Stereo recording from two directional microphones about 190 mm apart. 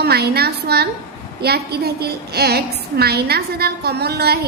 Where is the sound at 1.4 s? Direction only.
55° right (ahead or behind).